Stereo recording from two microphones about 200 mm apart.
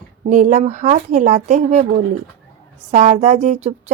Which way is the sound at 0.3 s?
40° right (ahead or behind).